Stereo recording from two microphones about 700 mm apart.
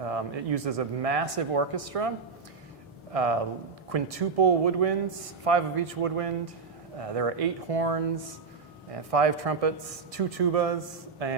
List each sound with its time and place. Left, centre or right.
0.0 s speech: right
3.1 s speech: right
9.0 s speech: right